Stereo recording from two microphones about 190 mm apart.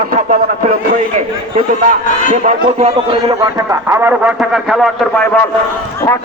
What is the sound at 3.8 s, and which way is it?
A man's voice, 10° right (ahead or behind).